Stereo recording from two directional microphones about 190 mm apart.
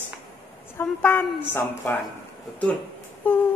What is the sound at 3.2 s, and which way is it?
Speech, 10° left (ahead or behind).